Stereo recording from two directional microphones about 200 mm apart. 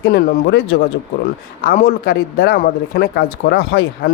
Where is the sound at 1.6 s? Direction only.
45° left (ahead or behind).